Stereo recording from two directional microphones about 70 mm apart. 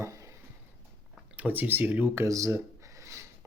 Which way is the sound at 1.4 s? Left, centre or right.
Right.